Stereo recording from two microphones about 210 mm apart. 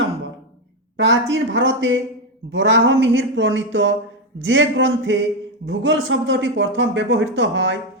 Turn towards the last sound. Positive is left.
turn(degrees=-60)  # may be behind; listen again after turning